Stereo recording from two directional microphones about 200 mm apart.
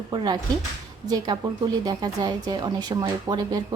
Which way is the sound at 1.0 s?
20° right (ahead or behind).